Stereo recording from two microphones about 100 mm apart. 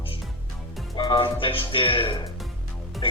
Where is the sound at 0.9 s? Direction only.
60° left (ahead or behind).